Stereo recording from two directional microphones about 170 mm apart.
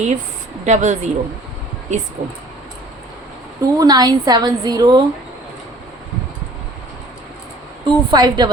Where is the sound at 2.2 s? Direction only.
50° right (ahead or behind).